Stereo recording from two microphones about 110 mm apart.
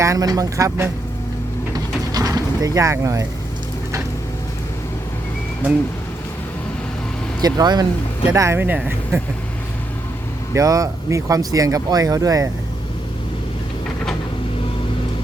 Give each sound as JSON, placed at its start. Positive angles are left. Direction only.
{"t": 0.0, "sound": "speech", "side_deg": -30}
{"t": 1.7, "sound": "mechanisms", "side_deg": -35}
{"t": 7.4, "sound": "speech", "side_deg": -40}
{"t": 8.5, "sound": "speech", "side_deg": -15}
{"t": 10.5, "sound": "speech", "side_deg": -30}